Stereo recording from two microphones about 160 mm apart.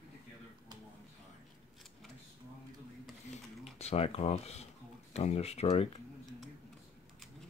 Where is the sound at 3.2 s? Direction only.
40° left (ahead or behind).